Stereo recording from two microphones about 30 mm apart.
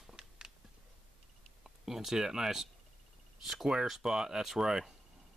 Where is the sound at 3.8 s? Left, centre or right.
Centre.